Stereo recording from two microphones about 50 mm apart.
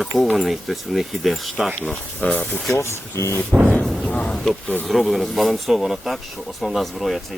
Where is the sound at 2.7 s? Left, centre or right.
Left.